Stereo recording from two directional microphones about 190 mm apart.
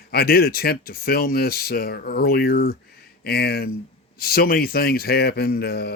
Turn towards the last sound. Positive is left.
turn(degrees=60)  # may be behind; listen again after turning